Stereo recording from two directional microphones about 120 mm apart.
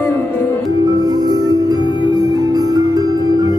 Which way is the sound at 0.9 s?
35° right (ahead or behind).